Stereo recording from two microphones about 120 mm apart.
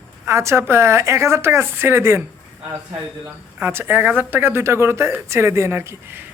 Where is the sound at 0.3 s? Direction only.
25° right (ahead or behind).